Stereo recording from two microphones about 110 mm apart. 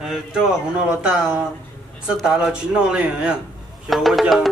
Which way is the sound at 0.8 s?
5° right (ahead or behind).